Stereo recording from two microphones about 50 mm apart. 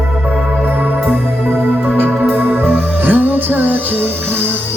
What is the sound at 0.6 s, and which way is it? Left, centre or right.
Music, right.